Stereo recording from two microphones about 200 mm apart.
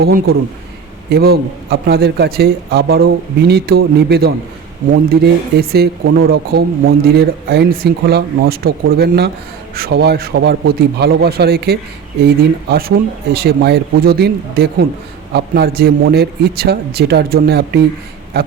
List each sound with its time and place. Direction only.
0.0 s a man's voice: 50° right (ahead or behind)